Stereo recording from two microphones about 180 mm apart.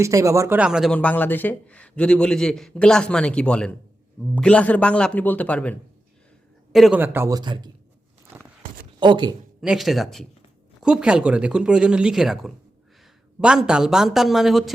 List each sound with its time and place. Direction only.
0.0 s speech: 15° right (ahead or behind)
0.9 s a man's voice: 10° left (ahead or behind)
6.7 s a man's voice: centre (ahead or behind)
7.0 s speech: 10° right (ahead or behind)
9.0 s speech: 25° right (ahead or behind)
9.6 s a man's voice: centre (ahead or behind)